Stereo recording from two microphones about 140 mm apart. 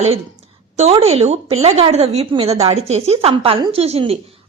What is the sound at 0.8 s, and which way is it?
A woman's voice, 50° right (ahead or behind).